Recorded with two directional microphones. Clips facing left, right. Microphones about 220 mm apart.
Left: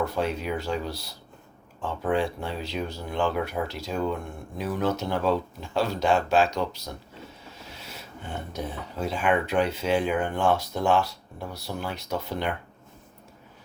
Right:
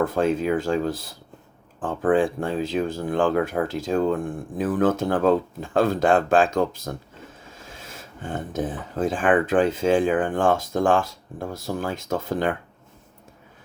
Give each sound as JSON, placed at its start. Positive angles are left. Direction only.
{"t": 0.0, "sound": "speech", "side_deg": -50}